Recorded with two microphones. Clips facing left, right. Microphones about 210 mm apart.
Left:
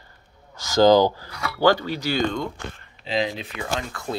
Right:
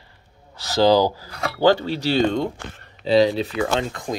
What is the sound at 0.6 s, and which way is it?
Speech, 35° right (ahead or behind).